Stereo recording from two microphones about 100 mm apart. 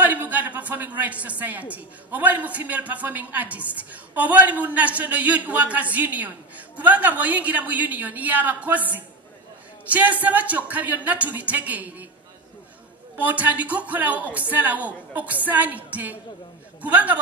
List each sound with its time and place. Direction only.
0.0 s a woman's voice: 15° right (ahead or behind)
13.2 s a woman's voice: 15° right (ahead or behind)